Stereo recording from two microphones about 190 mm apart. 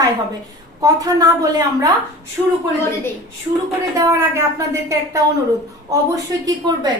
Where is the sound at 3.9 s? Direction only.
15° right (ahead or behind).